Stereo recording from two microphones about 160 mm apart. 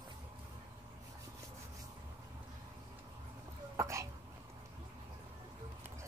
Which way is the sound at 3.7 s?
20° right (ahead or behind).